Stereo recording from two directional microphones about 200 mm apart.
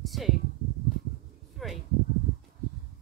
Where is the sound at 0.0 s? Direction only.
Centre (ahead or behind).